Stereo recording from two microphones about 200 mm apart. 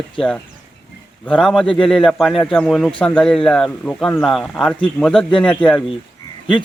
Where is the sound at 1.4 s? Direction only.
Centre (ahead or behind).